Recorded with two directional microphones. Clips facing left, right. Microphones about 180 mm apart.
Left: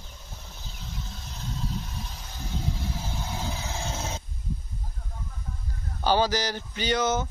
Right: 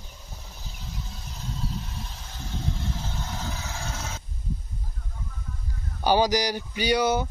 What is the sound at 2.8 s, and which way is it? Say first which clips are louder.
Vehicle: even; 10° left (ahead or behind).